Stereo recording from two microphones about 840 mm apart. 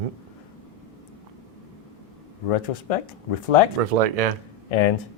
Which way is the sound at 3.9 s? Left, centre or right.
Right.